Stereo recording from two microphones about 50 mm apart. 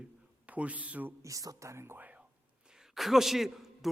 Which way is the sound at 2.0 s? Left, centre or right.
Right.